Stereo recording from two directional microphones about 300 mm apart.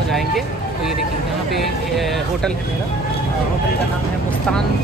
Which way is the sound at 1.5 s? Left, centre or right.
Centre.